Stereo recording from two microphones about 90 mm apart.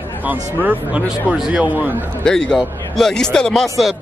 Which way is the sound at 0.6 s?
20° right (ahead or behind).